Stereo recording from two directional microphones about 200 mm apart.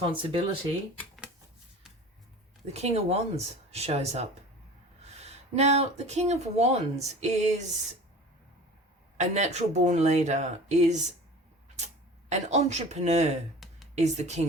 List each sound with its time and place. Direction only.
0.0 s speech: 25° right (ahead or behind)
0.9 s shuffling cards: centre (ahead or behind)
2.7 s speech: 30° right (ahead or behind)
9.1 s speech: 35° right (ahead or behind)
12.3 s speech: 35° right (ahead or behind)